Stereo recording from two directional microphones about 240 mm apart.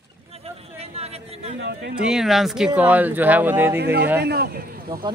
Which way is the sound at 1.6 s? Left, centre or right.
Right.